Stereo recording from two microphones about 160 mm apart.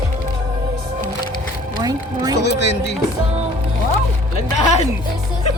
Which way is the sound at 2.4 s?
90° left.